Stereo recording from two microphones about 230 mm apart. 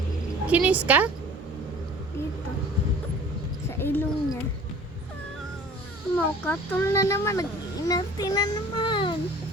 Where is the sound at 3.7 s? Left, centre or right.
Centre.